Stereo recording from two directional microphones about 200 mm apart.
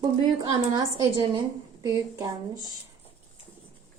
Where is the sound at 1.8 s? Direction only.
15° right (ahead or behind).